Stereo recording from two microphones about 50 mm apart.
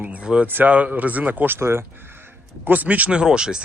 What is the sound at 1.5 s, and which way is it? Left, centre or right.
Speech, right.